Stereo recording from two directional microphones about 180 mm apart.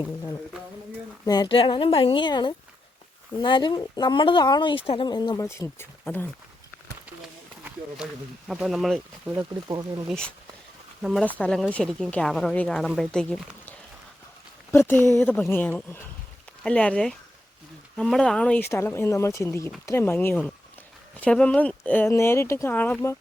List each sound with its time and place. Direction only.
0.0 s speech: 15° left (ahead or behind)
7.2 s a sound: 5° right (ahead or behind)
8.4 s a woman's voice: centre (ahead or behind)
9.6 s speech: 20° right (ahead or behind)
10.1 s a woman's voice: 5° left (ahead or behind)